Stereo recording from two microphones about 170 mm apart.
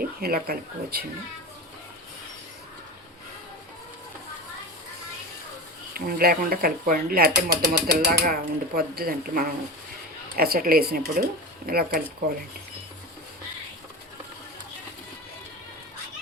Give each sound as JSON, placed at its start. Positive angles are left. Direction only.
{"t": 0.0, "sound": "speech", "side_deg": -60}
{"t": 5.9, "sound": "speech", "side_deg": -60}